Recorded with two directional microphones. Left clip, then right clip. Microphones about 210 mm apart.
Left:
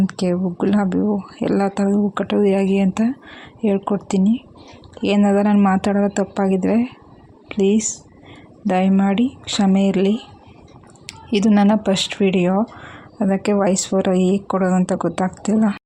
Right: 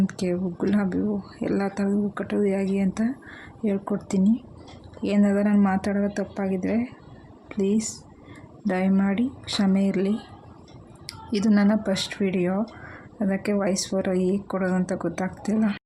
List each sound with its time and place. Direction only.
0.1 s a woman's voice: 10° left (ahead or behind)